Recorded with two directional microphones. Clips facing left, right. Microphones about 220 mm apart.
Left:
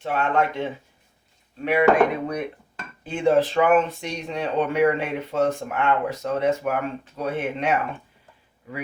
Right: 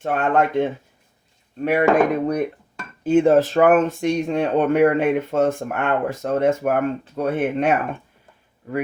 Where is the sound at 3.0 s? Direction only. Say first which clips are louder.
Right 5 dB; 45° right (ahead or behind).